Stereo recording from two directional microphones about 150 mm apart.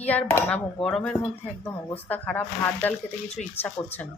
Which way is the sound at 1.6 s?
15° left (ahead or behind).